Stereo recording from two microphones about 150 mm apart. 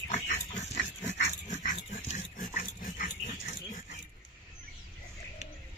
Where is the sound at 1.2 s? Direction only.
55° left (ahead or behind).